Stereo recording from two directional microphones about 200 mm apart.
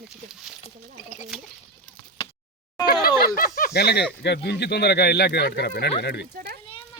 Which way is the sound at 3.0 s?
45° left (ahead or behind).